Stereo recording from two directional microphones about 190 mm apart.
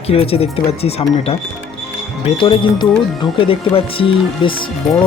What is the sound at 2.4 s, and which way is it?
Speech, 25° left (ahead or behind).